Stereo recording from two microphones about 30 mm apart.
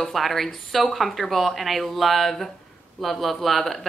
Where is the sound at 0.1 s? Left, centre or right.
Centre.